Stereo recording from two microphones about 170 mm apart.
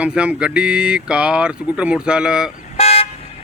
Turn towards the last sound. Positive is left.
turn(degrees=40)  # may be behind; listen again after turning